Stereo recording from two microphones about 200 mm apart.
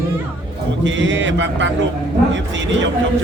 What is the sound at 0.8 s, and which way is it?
Speech, 70° right (ahead or behind).